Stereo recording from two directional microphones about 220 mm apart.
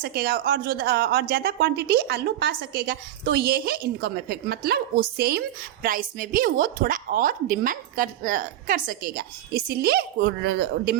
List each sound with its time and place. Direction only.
0.0 s a woman's voice: 45° right (ahead or behind)